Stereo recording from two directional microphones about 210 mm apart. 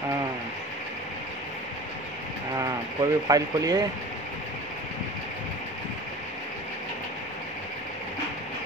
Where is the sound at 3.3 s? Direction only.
15° right (ahead or behind).